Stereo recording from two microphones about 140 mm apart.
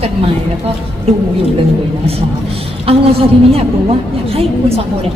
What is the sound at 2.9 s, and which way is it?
Speech, 45° right (ahead or behind).